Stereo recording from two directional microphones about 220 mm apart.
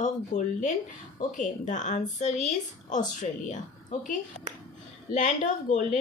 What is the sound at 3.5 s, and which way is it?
A woman's voice, 35° left (ahead or behind).